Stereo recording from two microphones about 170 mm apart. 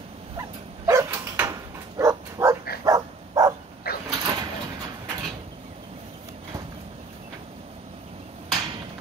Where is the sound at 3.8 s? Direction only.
65° left (ahead or behind).